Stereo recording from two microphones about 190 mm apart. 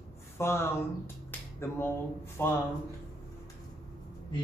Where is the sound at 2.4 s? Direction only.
10° left (ahead or behind).